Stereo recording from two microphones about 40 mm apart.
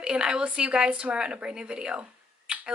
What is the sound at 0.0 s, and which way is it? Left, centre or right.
Speech, right.